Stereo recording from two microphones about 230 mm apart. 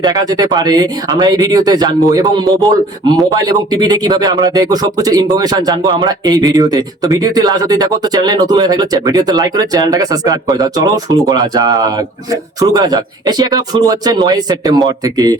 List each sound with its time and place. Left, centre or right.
0.0 s speech: centre